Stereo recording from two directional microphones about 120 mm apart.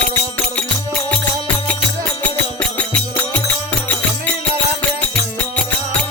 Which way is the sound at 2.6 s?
10° left (ahead or behind).